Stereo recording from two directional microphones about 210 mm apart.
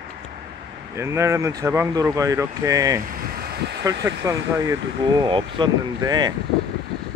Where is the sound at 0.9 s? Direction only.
15° right (ahead or behind).